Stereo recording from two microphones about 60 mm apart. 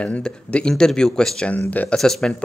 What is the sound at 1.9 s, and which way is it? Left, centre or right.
Speech, centre.